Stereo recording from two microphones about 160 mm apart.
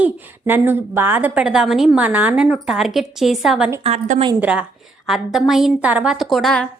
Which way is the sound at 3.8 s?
40° right (ahead or behind).